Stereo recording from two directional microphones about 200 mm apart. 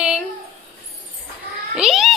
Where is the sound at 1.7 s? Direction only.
Centre (ahead or behind).